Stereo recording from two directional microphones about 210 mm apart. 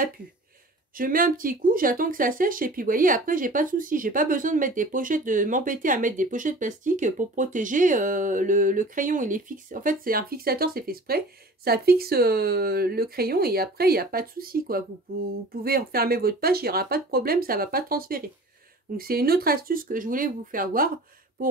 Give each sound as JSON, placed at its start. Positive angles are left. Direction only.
{"t": 0.9, "sound": "speech", "side_deg": -40}